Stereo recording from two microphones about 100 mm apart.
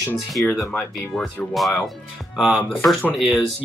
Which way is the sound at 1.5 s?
Centre (ahead or behind).